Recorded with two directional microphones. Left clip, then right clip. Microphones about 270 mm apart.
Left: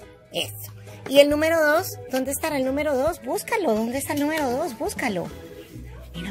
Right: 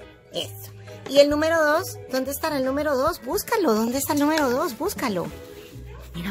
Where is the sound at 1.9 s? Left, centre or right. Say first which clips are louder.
Even; centre.